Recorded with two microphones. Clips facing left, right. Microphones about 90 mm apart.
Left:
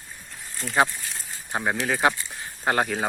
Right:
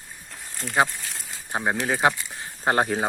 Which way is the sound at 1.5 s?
15° right (ahead or behind).